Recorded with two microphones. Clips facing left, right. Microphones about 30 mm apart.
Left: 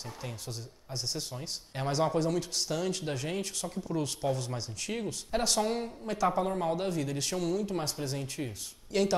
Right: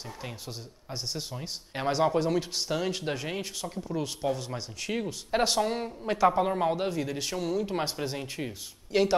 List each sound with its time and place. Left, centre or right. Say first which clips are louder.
0.2 s speech: right 1 dB; centre
7.6 s speech: right 3 dB; right